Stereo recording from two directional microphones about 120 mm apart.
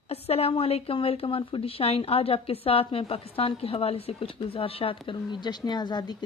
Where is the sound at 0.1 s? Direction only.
55° left (ahead or behind).